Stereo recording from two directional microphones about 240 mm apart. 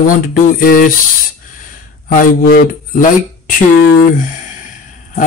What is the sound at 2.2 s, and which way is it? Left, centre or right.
Speech, left.